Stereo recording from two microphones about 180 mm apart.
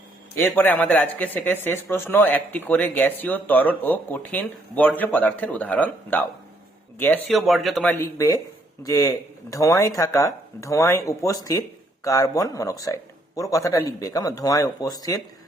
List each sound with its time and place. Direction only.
0.3 s speech: 10° left (ahead or behind)